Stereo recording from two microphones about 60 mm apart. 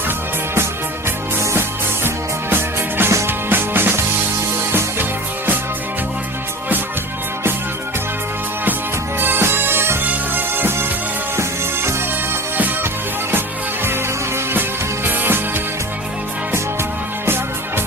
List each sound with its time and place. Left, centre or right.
2.0 s music: right
9.1 s music: right
15.0 s music: right
17.2 s music: right